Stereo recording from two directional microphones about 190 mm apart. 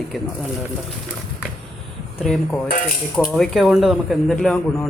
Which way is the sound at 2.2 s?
Centre (ahead or behind).